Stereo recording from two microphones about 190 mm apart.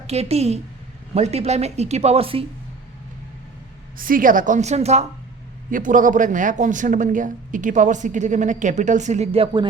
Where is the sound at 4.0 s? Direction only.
45° right (ahead or behind); by 9.6 s 30° right (ahead or behind).